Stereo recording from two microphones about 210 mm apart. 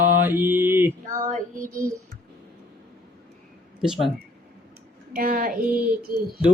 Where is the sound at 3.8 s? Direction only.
Centre (ahead or behind).